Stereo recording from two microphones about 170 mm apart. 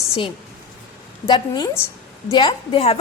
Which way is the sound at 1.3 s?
25° left (ahead or behind).